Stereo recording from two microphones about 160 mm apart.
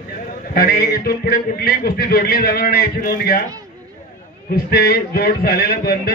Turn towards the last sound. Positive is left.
turn(degrees=70)  # may be behind; listen again after turning